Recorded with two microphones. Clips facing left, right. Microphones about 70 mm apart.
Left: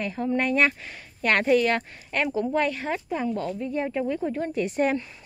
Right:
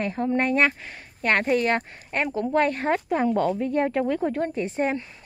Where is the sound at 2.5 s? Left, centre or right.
Right.